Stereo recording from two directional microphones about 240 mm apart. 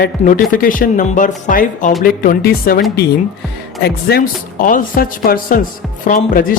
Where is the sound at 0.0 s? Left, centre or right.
Left.